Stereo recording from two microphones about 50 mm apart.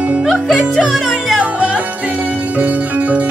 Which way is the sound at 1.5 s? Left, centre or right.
Right.